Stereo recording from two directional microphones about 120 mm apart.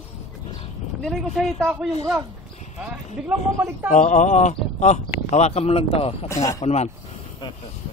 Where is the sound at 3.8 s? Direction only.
90° left; by 5.0 s 75° left (ahead or behind).